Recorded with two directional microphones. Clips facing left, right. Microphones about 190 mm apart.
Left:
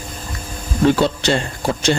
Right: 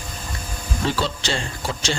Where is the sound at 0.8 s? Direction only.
55° left (ahead or behind).